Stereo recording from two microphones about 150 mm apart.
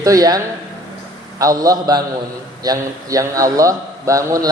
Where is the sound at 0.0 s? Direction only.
25° right (ahead or behind).